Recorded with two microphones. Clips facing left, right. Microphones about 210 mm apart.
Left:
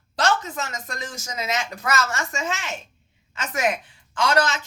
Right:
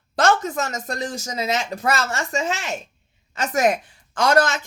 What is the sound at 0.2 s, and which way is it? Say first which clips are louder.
A woman's voice: right 4 dB; 45° right (ahead or behind).